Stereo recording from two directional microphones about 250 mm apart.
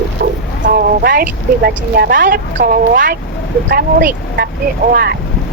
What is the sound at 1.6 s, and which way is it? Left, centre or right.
Speech, right.